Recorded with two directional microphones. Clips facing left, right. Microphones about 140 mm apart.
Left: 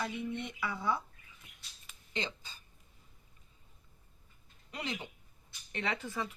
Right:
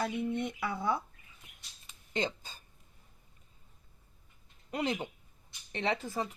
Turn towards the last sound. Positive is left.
turn(degrees=-40)  # may be behind; listen again after turning